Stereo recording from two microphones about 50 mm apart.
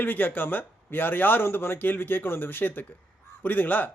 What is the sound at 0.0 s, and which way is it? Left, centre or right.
Speech, left.